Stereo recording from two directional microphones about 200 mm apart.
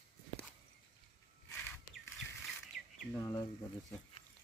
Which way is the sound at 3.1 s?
15° left (ahead or behind).